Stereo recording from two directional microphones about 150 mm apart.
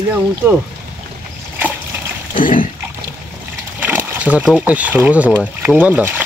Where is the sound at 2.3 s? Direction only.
65° left (ahead or behind).